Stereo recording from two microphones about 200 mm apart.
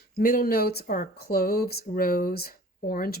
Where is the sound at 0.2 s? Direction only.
45° left (ahead or behind).